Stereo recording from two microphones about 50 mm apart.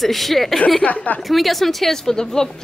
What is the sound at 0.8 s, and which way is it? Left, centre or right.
Speech, left.